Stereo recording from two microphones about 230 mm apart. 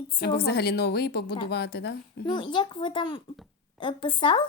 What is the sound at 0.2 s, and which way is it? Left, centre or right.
A woman's voice, left.